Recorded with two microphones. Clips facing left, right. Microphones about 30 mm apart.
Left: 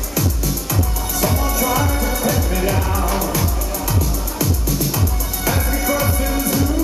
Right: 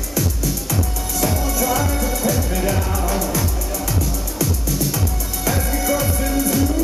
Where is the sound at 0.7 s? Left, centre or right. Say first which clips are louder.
Left 1 dB; centre.